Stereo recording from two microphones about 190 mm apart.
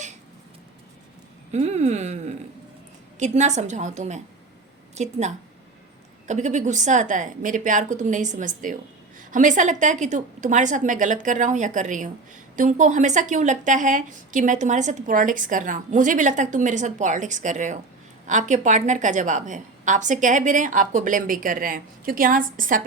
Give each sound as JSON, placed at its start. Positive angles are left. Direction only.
{"t": 1.5, "sound": "a woman's voice", "side_deg": -35}
{"t": 6.2, "sound": "a woman's voice", "side_deg": -40}